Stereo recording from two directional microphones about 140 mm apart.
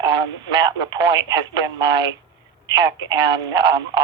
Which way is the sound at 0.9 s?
30° right (ahead or behind).